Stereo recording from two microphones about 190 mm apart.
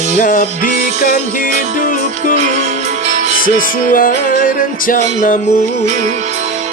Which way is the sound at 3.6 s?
45° left (ahead or behind).